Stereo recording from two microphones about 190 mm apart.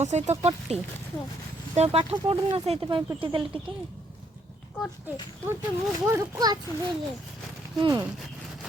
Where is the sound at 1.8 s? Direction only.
35° right (ahead or behind).